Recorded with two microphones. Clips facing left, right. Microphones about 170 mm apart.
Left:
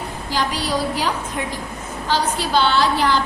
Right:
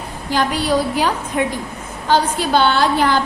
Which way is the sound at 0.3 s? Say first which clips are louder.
Right 5 dB; 55° right (ahead or behind).